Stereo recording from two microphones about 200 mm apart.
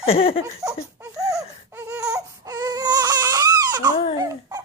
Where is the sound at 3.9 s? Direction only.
25° left (ahead or behind).